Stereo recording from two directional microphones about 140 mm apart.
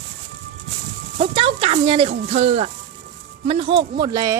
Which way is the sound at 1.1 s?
40° right (ahead or behind).